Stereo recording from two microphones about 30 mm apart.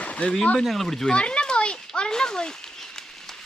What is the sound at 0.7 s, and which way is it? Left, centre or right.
Speech, centre.